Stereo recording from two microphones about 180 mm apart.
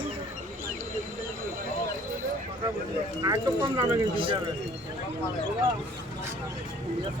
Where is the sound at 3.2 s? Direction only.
25° right (ahead or behind).